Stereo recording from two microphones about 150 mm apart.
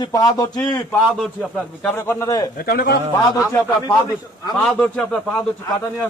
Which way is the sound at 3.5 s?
15° left (ahead or behind).